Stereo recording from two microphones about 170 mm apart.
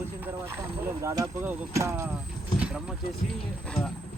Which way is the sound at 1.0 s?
20° right (ahead or behind).